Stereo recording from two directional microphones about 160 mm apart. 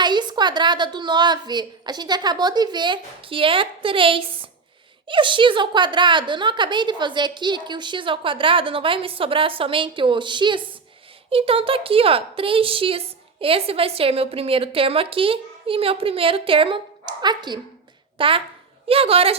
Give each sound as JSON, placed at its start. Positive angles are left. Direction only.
{"t": 0.0, "sound": "a woman's voice", "side_deg": -30}